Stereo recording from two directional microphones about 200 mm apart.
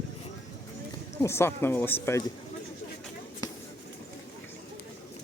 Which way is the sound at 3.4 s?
20° left (ahead or behind).